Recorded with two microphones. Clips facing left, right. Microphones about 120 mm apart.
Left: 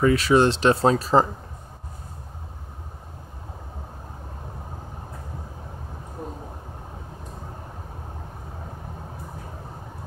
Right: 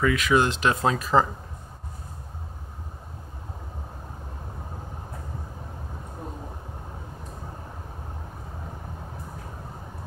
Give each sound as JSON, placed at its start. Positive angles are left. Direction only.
{"t": 0.0, "sound": "speech", "side_deg": 35}